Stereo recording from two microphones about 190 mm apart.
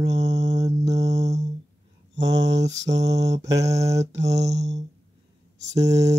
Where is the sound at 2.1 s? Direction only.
65° right (ahead or behind).